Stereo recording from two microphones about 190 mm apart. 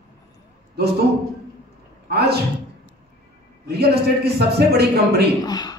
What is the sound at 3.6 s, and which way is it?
A man's voice, 55° right (ahead or behind).